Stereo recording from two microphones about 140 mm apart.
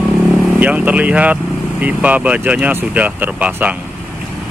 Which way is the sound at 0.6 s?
10° right (ahead or behind).